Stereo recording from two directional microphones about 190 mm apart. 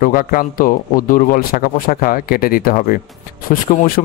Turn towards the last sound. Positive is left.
turn(degrees=45)  # may be behind; listen again after turning